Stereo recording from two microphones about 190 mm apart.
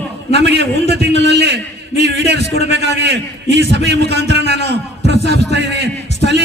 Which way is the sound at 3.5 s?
65° right (ahead or behind).